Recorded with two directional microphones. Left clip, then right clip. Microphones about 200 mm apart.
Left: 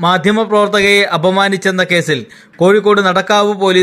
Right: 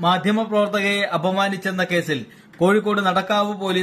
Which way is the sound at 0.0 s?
35° left (ahead or behind).